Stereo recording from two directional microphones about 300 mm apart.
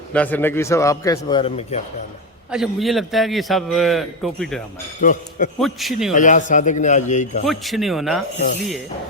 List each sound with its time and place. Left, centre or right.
0.1 s a man's voice: centre
2.5 s a man's voice: centre
4.9 s a man's voice: left
5.5 s a man's voice: centre
6.1 s a man's voice: left
7.4 s a man's voice: centre